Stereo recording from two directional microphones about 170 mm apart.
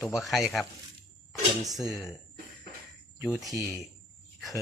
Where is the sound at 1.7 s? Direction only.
Centre (ahead or behind).